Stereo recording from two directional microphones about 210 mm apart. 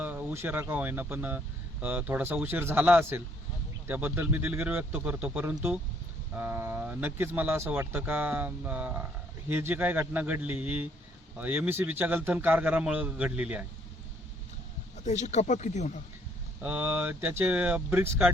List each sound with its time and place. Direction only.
0.0 s speech: 10° right (ahead or behind)
15.0 s speech: 35° left (ahead or behind)
16.6 s speech: 10° right (ahead or behind)